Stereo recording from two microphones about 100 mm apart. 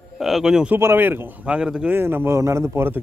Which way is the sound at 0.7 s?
20° right (ahead or behind).